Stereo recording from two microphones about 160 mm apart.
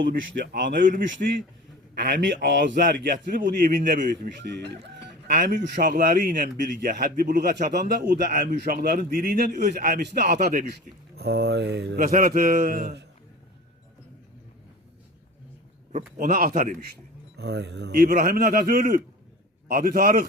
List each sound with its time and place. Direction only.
0.1 s speech: 65° right (ahead or behind)
2.0 s a man's voice: 90° right
9.9 s a sound: 90° right
10.3 s speech: 60° right (ahead or behind)
11.2 s a sound: 90° right
15.9 s speech: 50° right (ahead or behind); by 16.7 s 65° right (ahead or behind)
17.3 s a man's voice: 90° right; by 20.2 s 70° right (ahead or behind)